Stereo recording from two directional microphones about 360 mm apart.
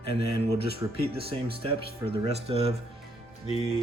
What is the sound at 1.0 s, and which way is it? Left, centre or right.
Speech, centre.